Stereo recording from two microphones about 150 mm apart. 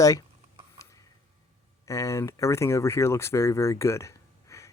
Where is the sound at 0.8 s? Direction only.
20° left (ahead or behind).